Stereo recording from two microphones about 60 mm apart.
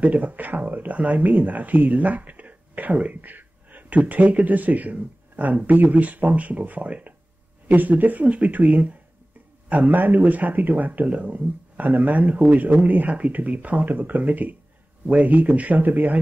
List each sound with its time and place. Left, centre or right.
0.0 s speech: right